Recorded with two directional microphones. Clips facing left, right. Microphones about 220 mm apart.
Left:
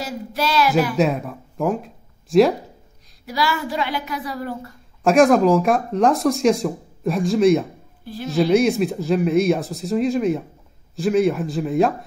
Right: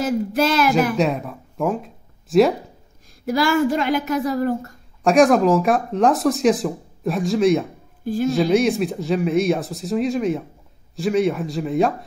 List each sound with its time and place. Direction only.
0.0 s a sound: 50° right (ahead or behind)
0.9 s speech: centre (ahead or behind)
3.3 s a woman's voice: 50° right (ahead or behind)
5.0 s speech: centre (ahead or behind)
8.0 s speech: 45° right (ahead or behind)
8.3 s speech: centre (ahead or behind)